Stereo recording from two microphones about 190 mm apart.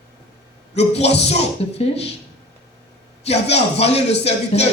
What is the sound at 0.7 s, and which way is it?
A man's voice, 35° left (ahead or behind).